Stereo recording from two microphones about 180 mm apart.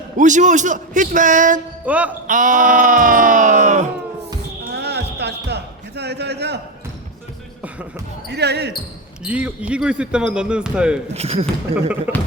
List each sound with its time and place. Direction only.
0.2 s a sound: 45° right (ahead or behind)
1.8 s speech: 10° right (ahead or behind)
2.2 s a sound: 45° right (ahead or behind)
4.7 s basketball bounce: 65° right (ahead or behind)
8.3 s speech: 70° right (ahead or behind)
9.2 s speech: 5° right (ahead or behind)
11.1 s speech: 35° right (ahead or behind)